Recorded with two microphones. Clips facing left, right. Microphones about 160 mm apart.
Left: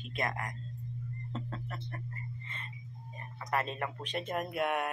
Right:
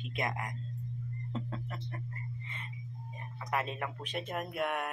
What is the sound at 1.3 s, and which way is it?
Speech, 10° right (ahead or behind).